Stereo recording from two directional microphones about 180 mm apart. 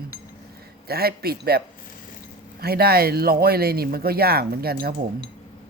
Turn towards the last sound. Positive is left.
turn(degrees=-60)  # may be behind; listen again after turning